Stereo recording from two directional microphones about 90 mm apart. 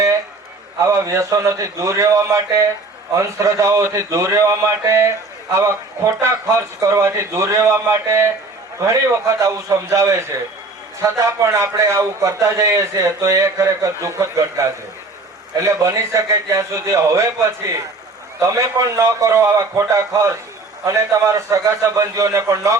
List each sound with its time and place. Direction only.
0.9 s speech: 35° right (ahead or behind)